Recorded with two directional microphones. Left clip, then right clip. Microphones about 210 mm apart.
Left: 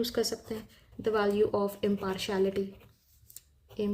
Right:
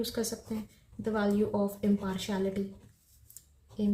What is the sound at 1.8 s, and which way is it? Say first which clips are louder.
Speech: left 2 dB; 40° left (ahead or behind).